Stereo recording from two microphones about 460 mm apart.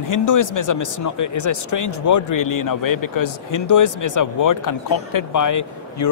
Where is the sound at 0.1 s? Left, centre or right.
Left.